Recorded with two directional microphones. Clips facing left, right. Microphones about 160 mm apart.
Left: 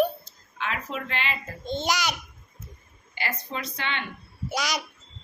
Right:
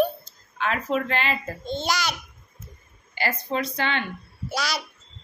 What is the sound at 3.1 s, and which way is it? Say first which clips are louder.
Speech: right 6 dB; 35° right (ahead or behind).